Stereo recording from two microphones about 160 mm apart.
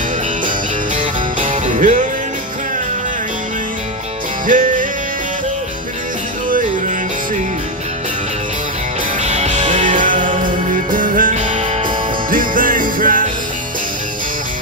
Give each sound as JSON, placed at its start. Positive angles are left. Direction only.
{"t": 0.9, "sound": "music", "side_deg": -50}
{"t": 4.5, "sound": "music", "side_deg": -55}
{"t": 9.2, "sound": "music", "side_deg": -45}
{"t": 12.3, "sound": "music", "side_deg": -60}